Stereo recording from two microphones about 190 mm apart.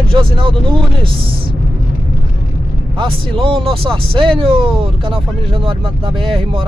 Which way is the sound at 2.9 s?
25° right (ahead or behind).